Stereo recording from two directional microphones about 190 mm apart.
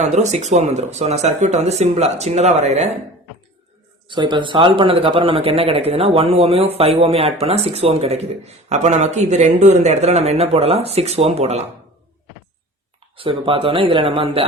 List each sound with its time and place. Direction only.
0.0 s speech: 35° right (ahead or behind)
4.1 s speech: 25° right (ahead or behind)
13.1 s speech: 30° right (ahead or behind)